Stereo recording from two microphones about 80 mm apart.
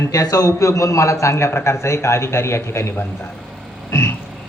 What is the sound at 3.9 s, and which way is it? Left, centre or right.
Frog, left.